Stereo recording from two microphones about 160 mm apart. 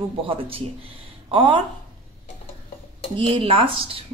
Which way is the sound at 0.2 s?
35° right (ahead or behind).